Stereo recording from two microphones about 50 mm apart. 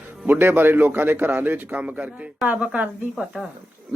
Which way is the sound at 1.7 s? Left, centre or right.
Right.